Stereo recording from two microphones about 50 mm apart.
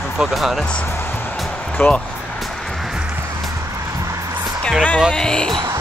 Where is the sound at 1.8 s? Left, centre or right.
Left.